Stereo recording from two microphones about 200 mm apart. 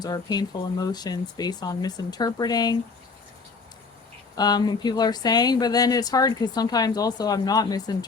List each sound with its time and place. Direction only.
0.0 s speech: 20° left (ahead or behind)
4.4 s speech: 20° left (ahead or behind)